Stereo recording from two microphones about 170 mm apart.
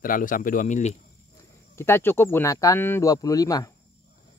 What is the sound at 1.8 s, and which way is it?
Speech, 15° left (ahead or behind).